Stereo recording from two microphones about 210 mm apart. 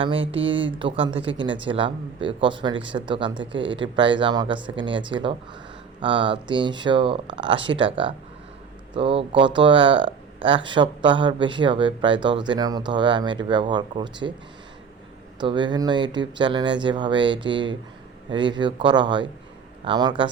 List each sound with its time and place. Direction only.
0.0 s speech: 25° right (ahead or behind)
15.4 s speech: 20° right (ahead or behind)